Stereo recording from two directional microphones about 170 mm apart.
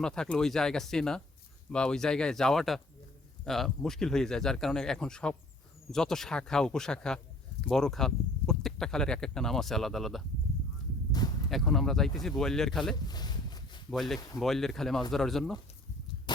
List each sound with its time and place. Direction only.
0.0 s speech: 5° left (ahead or behind)
11.4 s speech: centre (ahead or behind)
13.1 s a sound: 25° left (ahead or behind)
13.9 s speech: centre (ahead or behind)